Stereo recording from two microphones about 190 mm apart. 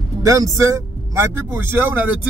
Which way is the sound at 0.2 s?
15° right (ahead or behind).